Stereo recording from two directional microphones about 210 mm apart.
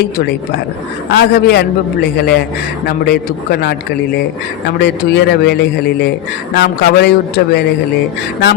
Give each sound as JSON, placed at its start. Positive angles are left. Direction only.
{"t": 1.1, "sound": "a man's voice", "side_deg": 50}
{"t": 4.8, "sound": "a man's voice", "side_deg": 50}
{"t": 6.6, "sound": "a man's voice", "side_deg": 50}